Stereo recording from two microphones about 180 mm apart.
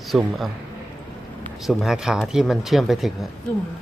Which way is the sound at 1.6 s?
Centre (ahead or behind).